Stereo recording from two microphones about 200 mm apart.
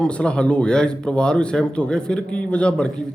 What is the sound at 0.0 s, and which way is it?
A man's voice, 5° left (ahead or behind).